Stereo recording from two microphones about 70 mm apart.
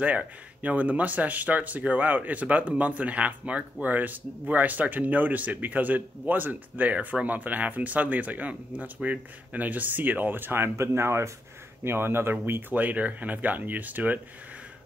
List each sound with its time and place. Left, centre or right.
0.0 s speech: right